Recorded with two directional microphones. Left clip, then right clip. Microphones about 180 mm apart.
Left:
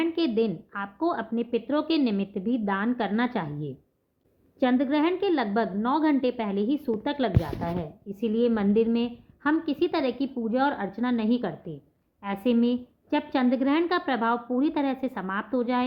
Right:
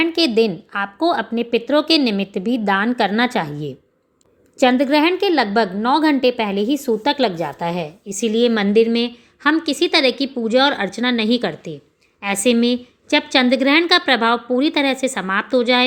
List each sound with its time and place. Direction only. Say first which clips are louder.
0.0 s a woman's voice: right 9 dB; 30° right (ahead or behind)